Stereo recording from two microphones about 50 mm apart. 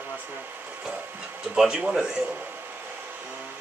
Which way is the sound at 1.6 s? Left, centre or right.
Centre.